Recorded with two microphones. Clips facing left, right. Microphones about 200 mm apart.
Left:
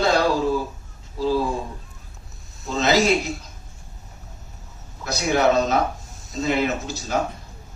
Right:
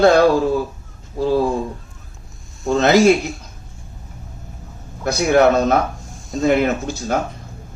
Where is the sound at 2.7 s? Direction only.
55° right (ahead or behind).